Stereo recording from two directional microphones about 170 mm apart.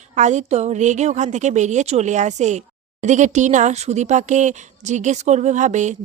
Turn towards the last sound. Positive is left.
turn(degrees=-45)  # may be behind; listen again after turning